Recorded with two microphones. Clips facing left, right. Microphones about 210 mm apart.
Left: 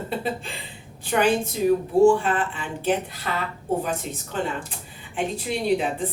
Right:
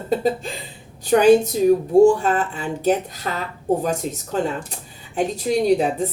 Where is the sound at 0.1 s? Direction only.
40° right (ahead or behind).